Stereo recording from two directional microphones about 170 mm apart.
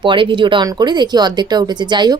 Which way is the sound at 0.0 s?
30° right (ahead or behind).